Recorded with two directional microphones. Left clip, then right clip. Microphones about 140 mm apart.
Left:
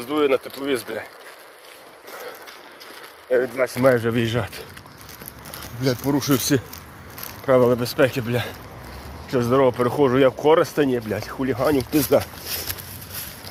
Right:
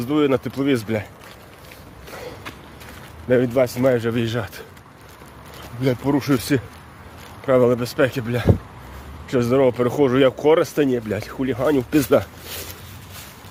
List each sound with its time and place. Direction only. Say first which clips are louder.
0.0 s speech: right 1 dB; 20° right (ahead or behind)
3.2 s speech: right 3 dB; 25° right (ahead or behind)
5.8 s speech: right 2 dB; 35° right (ahead or behind)
7.4 s speech: even; 35° right (ahead or behind)
9.3 s speech: right 1 dB; 50° right (ahead or behind)